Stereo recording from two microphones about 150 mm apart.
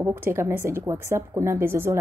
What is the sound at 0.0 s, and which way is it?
A woman's voice, 15° right (ahead or behind).